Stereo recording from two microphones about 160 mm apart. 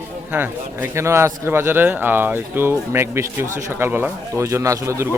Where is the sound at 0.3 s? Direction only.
15° right (ahead or behind).